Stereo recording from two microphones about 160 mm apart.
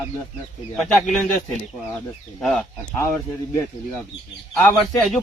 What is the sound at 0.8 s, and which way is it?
A man's voice, centre (ahead or behind).